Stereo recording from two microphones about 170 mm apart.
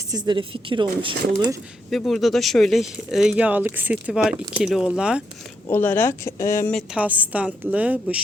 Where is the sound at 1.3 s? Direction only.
20° right (ahead or behind).